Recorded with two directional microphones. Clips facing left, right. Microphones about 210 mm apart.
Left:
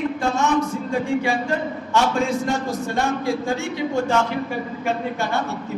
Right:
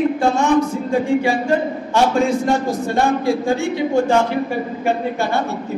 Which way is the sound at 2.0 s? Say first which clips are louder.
Right 4 dB; 35° right (ahead or behind).